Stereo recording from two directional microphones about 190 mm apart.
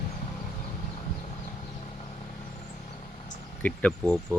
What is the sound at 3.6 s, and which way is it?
Speech, 5° left (ahead or behind).